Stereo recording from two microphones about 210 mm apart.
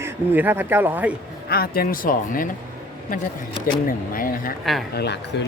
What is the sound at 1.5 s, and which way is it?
Speech, 45° left (ahead or behind).